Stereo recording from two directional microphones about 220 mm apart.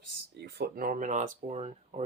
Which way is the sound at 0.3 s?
50° right (ahead or behind).